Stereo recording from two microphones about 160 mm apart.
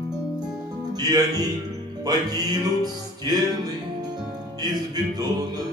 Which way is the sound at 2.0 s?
25° right (ahead or behind).